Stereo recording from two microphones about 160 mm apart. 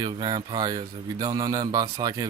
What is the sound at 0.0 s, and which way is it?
Speech, 25° right (ahead or behind).